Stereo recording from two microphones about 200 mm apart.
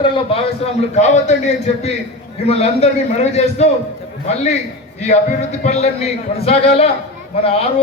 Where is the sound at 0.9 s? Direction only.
35° left (ahead or behind).